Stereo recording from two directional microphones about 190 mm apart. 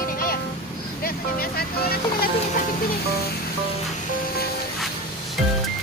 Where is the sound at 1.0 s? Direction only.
50° left (ahead or behind).